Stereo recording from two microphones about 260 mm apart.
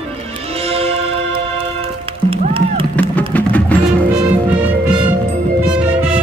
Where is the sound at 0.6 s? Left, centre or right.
Right.